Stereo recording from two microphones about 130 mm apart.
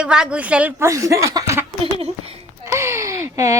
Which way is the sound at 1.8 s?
50° right (ahead or behind).